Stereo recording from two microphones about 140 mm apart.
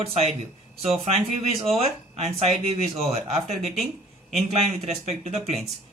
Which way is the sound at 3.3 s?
Centre (ahead or behind).